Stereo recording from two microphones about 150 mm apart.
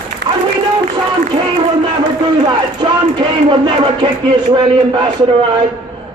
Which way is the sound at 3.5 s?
30° right (ahead or behind).